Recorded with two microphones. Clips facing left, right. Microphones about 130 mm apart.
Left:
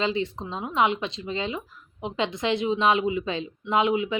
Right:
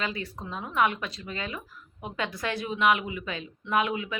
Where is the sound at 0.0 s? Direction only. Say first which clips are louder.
Left 7 dB; 25° left (ahead or behind).